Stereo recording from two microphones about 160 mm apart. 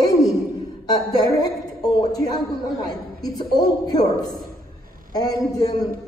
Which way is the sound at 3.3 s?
25° left (ahead or behind).